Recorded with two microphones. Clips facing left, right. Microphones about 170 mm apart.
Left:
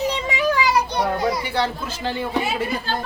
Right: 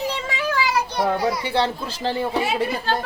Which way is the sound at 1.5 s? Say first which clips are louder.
Right 1 dB; 30° right (ahead or behind).